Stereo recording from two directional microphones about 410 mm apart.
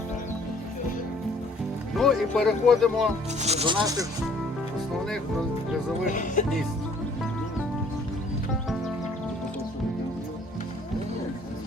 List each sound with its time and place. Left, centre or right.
2.0 s speech: centre
3.4 s speech: centre
6.1 s speech: centre